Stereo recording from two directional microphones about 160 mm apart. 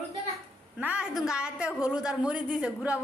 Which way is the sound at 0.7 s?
10° right (ahead or behind).